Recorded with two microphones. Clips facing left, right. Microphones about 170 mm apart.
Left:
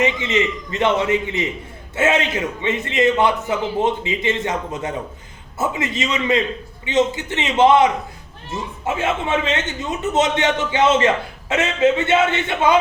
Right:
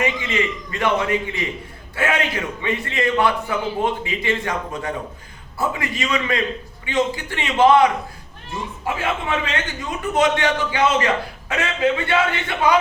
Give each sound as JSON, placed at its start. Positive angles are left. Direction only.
{"t": 0.0, "sound": "a man's voice", "side_deg": 20}